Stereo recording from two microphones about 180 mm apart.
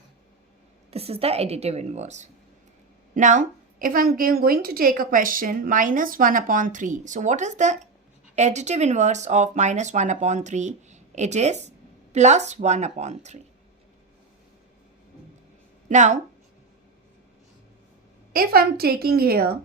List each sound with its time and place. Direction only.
0.9 s a woman's voice: 35° right (ahead or behind)
15.9 s speech: 40° right (ahead or behind)
18.3 s a woman's voice: 55° right (ahead or behind)